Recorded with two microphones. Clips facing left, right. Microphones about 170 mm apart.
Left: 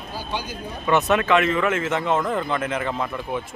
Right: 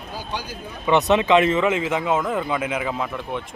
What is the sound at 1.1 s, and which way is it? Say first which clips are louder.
Speech: right 4 dB; 20° right (ahead or behind).